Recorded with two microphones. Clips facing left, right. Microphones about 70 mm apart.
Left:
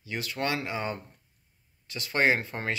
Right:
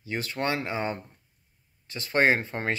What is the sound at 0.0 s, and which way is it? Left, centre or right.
Speech, right.